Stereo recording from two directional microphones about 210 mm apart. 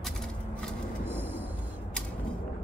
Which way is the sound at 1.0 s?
10° right (ahead or behind).